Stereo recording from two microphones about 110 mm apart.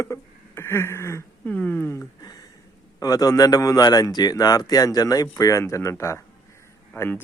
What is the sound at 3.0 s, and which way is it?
Speech, 35° left (ahead or behind).